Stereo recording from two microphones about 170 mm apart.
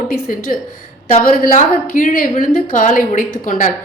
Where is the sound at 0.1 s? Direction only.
55° left (ahead or behind).